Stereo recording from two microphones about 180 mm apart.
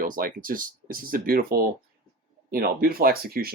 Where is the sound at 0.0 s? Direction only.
50° right (ahead or behind).